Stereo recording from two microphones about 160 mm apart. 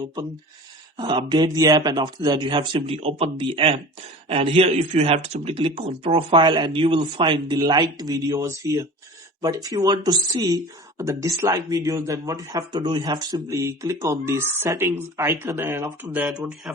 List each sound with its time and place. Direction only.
0.9 s a man's voice: 30° right (ahead or behind); by 16.7 s 5° right (ahead or behind)